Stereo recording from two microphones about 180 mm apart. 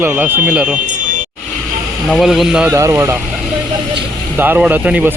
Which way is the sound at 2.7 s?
15° right (ahead or behind).